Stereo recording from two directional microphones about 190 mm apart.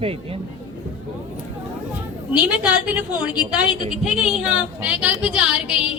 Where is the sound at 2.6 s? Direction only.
5° right (ahead or behind).